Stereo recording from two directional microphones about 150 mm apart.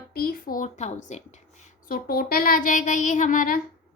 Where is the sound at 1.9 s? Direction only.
90° left.